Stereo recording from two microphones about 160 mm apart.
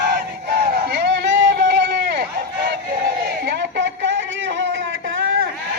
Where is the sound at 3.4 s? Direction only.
90° right.